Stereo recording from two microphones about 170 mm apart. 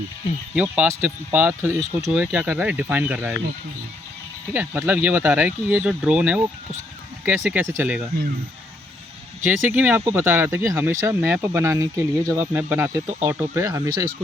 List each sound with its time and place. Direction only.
0.5 s speech: 10° right (ahead or behind)
4.5 s speech: 10° right (ahead or behind)
9.4 s speech: 10° right (ahead or behind)